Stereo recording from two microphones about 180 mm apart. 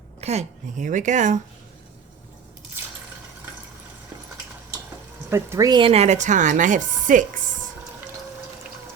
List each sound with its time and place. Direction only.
0.2 s a woman's voice: 35° right (ahead or behind)
5.3 s speech: 15° right (ahead or behind); by 7.3 s 45° right (ahead or behind)